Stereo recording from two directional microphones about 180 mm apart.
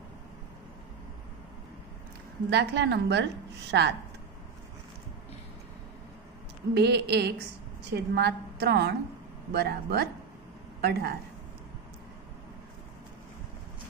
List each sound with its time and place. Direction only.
2.5 s a woman's voice: 70° right (ahead or behind)
6.7 s a woman's voice: 70° right (ahead or behind)